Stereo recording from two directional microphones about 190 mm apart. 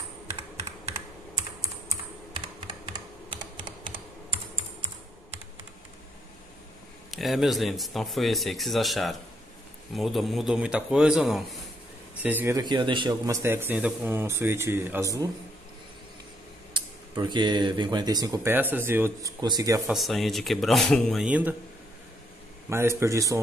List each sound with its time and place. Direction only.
2.4 s computer keyboard: 25° right (ahead or behind)
7.1 s a man's voice: centre (ahead or behind)
16.7 s speech: 25° right (ahead or behind)
19.9 s speech: centre (ahead or behind)
22.7 s a man's voice: 15° right (ahead or behind)